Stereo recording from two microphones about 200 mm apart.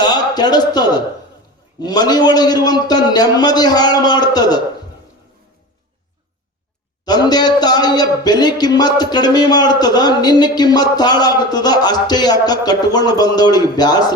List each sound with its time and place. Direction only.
0.0 s speech: 20° left (ahead or behind)
7.0 s speech: 20° left (ahead or behind)